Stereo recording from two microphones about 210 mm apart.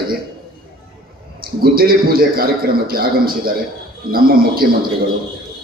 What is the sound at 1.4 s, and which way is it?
A man's voice, 45° right (ahead or behind).